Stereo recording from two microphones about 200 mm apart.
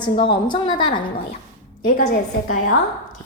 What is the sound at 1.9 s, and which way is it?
Speech, 50° left (ahead or behind).